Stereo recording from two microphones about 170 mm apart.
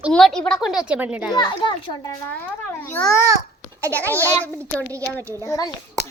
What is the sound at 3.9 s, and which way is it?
Speech, 10° left (ahead or behind).